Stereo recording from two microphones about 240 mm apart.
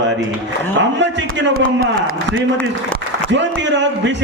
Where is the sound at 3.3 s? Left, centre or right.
Right.